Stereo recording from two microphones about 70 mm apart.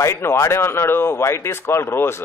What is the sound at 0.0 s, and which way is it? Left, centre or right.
Speech, left.